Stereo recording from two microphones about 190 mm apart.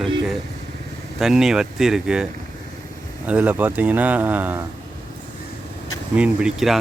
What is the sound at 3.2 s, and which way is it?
Speech, 10° right (ahead or behind).